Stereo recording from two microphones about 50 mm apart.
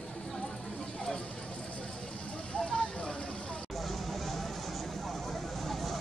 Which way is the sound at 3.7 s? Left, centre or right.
Centre.